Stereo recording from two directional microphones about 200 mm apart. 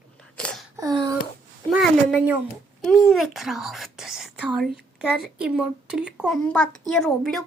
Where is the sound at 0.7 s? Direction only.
20° right (ahead or behind).